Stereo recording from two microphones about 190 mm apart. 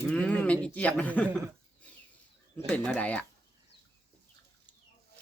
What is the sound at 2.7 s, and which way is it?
Speech, 5° left (ahead or behind).